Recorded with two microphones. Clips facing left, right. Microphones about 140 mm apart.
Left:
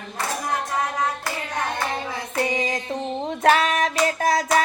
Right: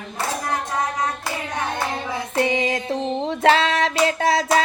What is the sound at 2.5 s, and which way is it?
Female singing, 30° right (ahead or behind).